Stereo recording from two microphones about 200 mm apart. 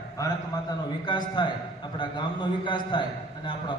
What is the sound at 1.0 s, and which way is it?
A man's voice, 20° left (ahead or behind).